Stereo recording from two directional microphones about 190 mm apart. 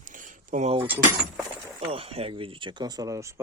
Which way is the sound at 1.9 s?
30° right (ahead or behind).